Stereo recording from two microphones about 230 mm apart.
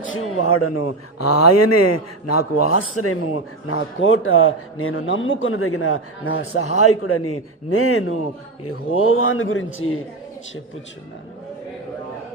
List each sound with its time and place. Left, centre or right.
0.0 s a man's voice: left